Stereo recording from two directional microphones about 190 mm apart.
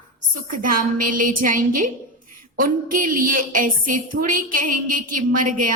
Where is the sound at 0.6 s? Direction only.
45° right (ahead or behind).